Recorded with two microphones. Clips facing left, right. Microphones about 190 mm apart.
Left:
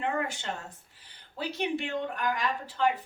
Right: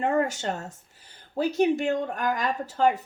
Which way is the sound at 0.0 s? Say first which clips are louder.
Right 7 dB; 45° right (ahead or behind).